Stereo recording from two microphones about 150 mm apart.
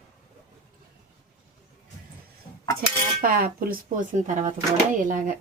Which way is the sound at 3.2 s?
75° right (ahead or behind).